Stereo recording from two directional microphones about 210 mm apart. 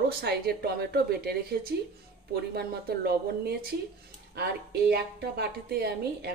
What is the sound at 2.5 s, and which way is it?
A woman's voice, 50° right (ahead or behind).